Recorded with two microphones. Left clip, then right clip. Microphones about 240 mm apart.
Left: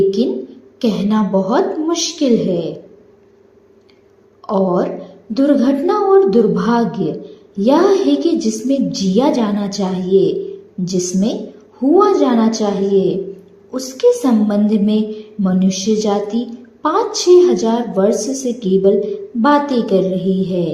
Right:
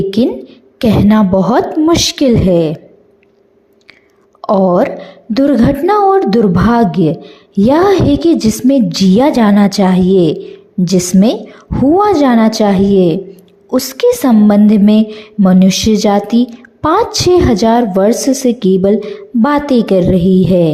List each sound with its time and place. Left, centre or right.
0.2 s a woman's voice: right
4.4 s a woman's voice: right